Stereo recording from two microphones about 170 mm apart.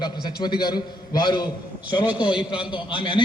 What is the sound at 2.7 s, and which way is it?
Speech, 30° left (ahead or behind).